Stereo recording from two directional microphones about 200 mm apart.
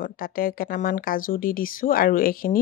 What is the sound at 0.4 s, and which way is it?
Speech, 45° left (ahead or behind).